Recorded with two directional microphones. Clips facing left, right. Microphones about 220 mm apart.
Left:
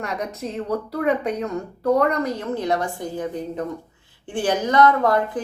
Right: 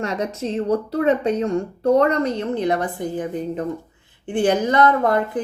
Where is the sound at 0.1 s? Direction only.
30° right (ahead or behind).